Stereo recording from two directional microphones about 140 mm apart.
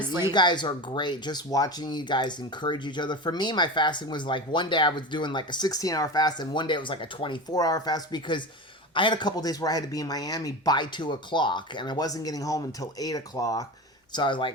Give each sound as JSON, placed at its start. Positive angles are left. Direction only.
{"t": 0.3, "sound": "speech", "side_deg": 30}